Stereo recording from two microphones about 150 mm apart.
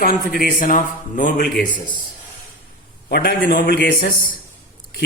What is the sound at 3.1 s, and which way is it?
A man's voice, 90° left.